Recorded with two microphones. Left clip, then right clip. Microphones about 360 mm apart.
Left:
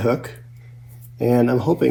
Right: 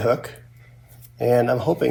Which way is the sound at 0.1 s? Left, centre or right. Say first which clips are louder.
Right 1 dB; right.